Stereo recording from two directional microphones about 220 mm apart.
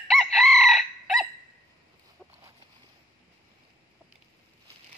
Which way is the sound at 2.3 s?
10° right (ahead or behind).